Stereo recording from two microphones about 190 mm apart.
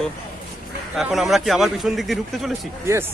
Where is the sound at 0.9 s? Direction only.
Centre (ahead or behind).